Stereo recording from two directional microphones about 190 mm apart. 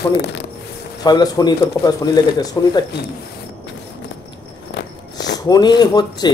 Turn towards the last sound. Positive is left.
turn(degrees=20)  # may be behind; listen again after turning